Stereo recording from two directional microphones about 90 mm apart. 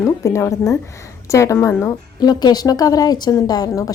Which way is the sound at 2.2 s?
50° left (ahead or behind).